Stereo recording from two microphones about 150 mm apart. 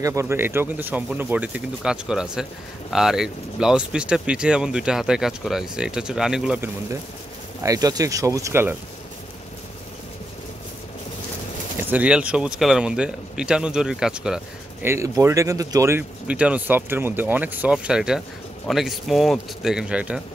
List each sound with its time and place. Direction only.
0.0 s speech: 20° right (ahead or behind)
7.6 s speech: 25° right (ahead or behind)
11.9 s speech: 10° right (ahead or behind)
14.9 s speech: 20° right (ahead or behind)